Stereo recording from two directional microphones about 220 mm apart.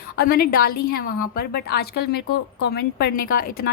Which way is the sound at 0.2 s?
45° left (ahead or behind).